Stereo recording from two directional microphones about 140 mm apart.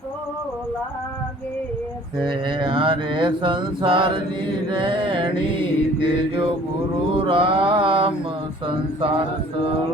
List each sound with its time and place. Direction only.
2.1 s mantra: 35° right (ahead or behind)